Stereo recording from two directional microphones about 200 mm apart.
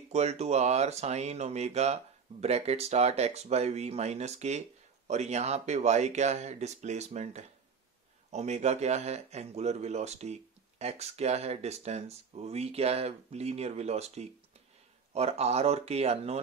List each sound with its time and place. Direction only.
0.1 s a man's voice: 35° right (ahead or behind)